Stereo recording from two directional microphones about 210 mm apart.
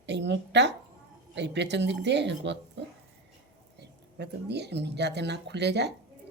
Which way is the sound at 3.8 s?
55° right (ahead or behind).